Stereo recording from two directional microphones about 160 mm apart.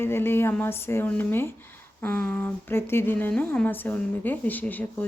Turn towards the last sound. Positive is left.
turn(degrees=10)  # may be behind; listen again after turning